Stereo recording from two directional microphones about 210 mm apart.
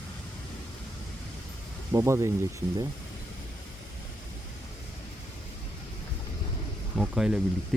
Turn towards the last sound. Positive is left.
turn(degrees=-5)  # may be behind; listen again after turning